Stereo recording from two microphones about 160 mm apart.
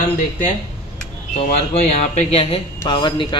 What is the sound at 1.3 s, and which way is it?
Speech, 45° left (ahead or behind).